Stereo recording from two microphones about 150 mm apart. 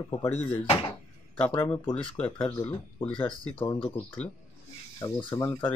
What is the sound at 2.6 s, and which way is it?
Speech, 30° left (ahead or behind).